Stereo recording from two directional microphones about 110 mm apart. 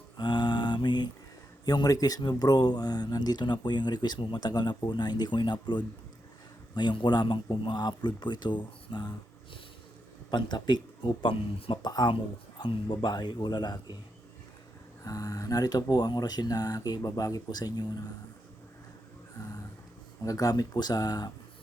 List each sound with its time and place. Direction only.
0.2 s mantra: 45° left (ahead or behind)
1.6 s speech: 35° left (ahead or behind)
10.3 s speech: 40° left (ahead or behind)
15.0 s speech: 35° left (ahead or behind)
20.2 s speech: 30° left (ahead or behind)